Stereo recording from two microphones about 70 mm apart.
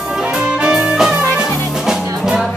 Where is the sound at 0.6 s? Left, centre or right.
Centre.